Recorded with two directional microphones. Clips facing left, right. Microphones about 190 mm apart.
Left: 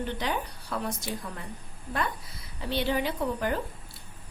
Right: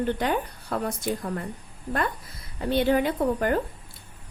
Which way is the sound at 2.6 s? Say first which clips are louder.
Right 6 dB; 50° right (ahead or behind).